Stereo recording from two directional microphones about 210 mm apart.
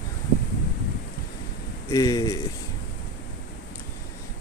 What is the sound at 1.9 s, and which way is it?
Speech, 15° left (ahead or behind).